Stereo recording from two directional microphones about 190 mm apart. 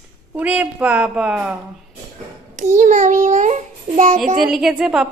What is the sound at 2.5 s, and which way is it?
A child's voice, 40° right (ahead or behind).